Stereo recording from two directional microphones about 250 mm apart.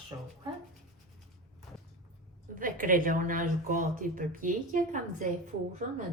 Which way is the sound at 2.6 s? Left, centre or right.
Right.